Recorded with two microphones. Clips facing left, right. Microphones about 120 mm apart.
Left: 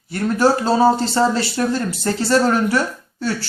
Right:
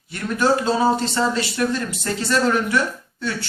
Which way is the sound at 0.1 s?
35° left (ahead or behind).